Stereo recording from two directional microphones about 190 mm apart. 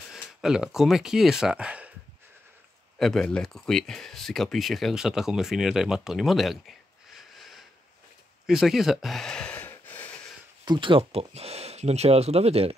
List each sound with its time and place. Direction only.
0.1 s speech: centre (ahead or behind)
3.0 s speech: centre (ahead or behind)
8.5 s a sound: centre (ahead or behind)
10.6 s speech: 25° right (ahead or behind)